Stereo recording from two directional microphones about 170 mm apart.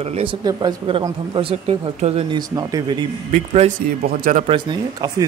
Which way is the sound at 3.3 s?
45° right (ahead or behind).